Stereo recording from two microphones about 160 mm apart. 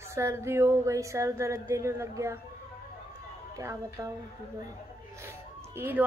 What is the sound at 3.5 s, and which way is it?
Speech, 20° right (ahead or behind).